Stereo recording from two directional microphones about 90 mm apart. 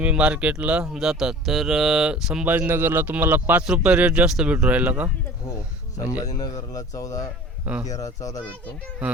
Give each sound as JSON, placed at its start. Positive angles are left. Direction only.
{"t": 0.0, "sound": "speech", "side_deg": -10}
{"t": 2.5, "sound": "speech", "side_deg": -20}
{"t": 6.1, "sound": "speech", "side_deg": 45}
{"t": 7.6, "sound": "a man's voice", "side_deg": -15}
{"t": 7.9, "sound": "speech", "side_deg": 40}